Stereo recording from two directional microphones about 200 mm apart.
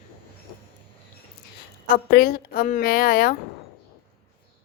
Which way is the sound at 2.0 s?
50° left (ahead or behind).